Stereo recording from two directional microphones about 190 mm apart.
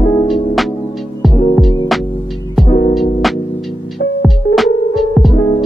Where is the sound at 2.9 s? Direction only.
Centre (ahead or behind).